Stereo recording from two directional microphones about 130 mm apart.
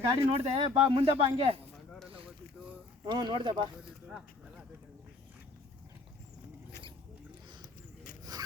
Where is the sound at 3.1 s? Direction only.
35° right (ahead or behind).